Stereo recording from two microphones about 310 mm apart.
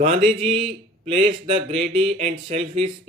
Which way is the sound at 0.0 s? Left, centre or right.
Centre.